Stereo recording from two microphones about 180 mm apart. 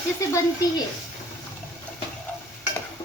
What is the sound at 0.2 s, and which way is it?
Speech, 15° left (ahead or behind).